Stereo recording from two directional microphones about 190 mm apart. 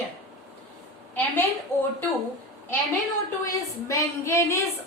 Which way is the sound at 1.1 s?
10° left (ahead or behind).